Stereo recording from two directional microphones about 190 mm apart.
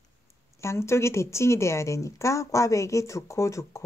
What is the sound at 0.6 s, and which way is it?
A woman's voice, 15° left (ahead or behind).